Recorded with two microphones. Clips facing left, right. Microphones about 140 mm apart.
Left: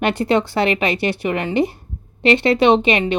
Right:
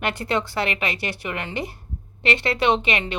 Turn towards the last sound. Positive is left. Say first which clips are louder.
# left 7 dB
turn(degrees=20)  # may be behind; listen again after turning